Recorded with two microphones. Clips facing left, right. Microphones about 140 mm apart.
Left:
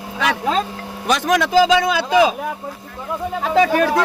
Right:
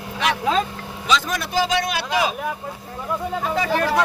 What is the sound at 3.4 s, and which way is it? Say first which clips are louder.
Speech: left 10 dB; 80° left.